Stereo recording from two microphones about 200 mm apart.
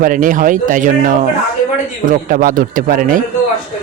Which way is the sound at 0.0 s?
40° right (ahead or behind).